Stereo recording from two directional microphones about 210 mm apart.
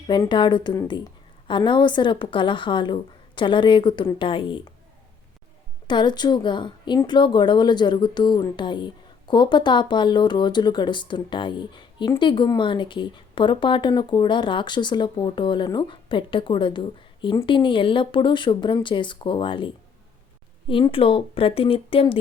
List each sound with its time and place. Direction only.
0.1 s speech: 20° left (ahead or behind)
5.9 s speech: 20° left (ahead or behind)